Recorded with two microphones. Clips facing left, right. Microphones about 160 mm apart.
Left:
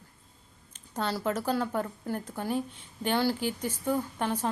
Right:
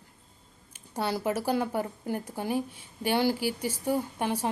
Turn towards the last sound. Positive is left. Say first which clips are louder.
# right 1 dB
turn(degrees=-10)  # may be behind; listen again after turning